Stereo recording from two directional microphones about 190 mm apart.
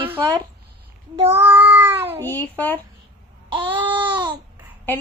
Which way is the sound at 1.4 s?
10° right (ahead or behind).